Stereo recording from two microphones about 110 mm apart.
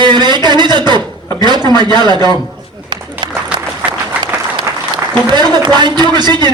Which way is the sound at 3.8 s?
15° right (ahead or behind).